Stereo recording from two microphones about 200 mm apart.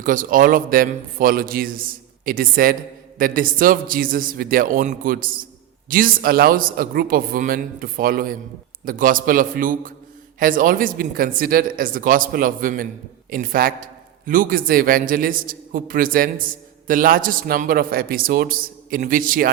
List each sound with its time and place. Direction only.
0.0 s a man's voice: 40° right (ahead or behind)